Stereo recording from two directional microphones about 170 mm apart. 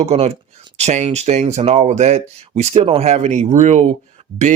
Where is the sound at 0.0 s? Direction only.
40° right (ahead or behind).